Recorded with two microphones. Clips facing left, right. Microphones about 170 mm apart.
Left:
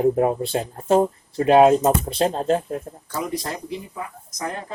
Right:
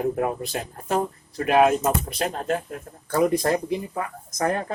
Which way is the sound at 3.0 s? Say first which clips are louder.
Right 9 dB; 55° right (ahead or behind).